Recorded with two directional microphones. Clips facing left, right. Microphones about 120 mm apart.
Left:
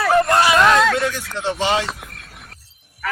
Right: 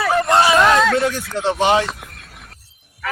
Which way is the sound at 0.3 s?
25° right (ahead or behind).